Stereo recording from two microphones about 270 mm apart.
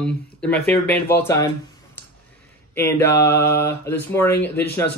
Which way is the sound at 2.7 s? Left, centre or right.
Centre.